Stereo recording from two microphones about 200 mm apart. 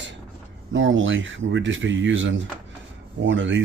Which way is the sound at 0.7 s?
70° right (ahead or behind).